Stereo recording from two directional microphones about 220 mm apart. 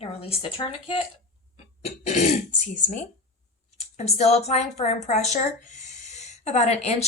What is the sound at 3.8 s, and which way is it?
Speech, 30° left (ahead or behind).